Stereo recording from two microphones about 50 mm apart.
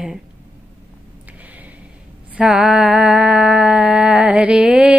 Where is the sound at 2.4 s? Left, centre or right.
Centre.